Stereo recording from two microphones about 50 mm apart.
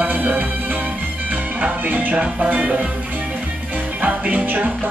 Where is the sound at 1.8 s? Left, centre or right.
Right.